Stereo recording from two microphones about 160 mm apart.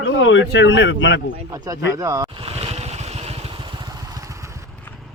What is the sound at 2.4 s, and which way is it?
Vehicle, 40° right (ahead or behind).